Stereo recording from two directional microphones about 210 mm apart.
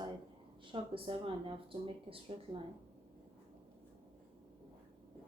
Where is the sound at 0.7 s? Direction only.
25° right (ahead or behind).